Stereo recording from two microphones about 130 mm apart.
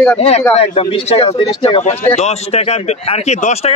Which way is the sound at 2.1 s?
55° left (ahead or behind).